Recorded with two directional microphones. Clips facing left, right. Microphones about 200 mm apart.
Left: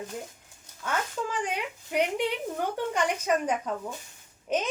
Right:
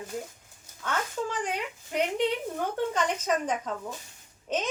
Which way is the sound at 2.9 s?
10° left (ahead or behind).